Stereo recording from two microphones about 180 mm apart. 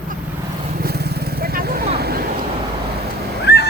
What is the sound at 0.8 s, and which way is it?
Vehicle, 60° right (ahead or behind).